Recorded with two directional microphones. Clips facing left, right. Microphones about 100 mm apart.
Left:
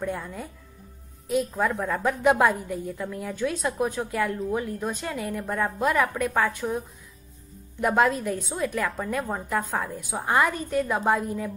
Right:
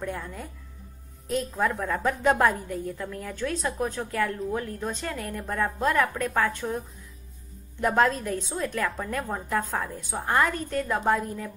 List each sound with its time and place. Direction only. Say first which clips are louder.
0.0 s a woman's voice: left 3 dB; 10° left (ahead or behind)
7.8 s a woman's voice: left 1 dB; 10° left (ahead or behind)